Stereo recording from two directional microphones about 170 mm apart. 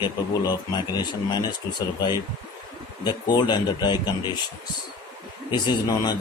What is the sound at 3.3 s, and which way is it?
Speech, 25° left (ahead or behind).